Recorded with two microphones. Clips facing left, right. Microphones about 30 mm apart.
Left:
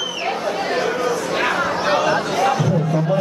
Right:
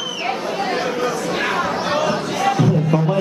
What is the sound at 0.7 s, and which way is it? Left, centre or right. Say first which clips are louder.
Chatter: left 1 dB; centre.